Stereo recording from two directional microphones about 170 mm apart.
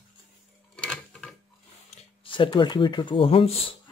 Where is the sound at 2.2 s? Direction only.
30° left (ahead or behind).